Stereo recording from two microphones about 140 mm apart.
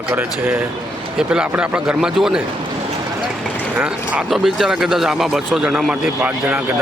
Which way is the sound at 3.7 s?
5° right (ahead or behind).